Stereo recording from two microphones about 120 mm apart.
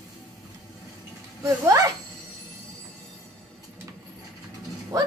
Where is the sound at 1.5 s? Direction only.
25° right (ahead or behind).